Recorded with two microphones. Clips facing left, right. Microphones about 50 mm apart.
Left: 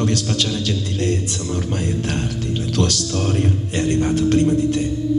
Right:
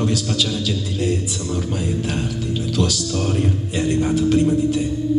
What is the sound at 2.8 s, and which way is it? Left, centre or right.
Speech, left.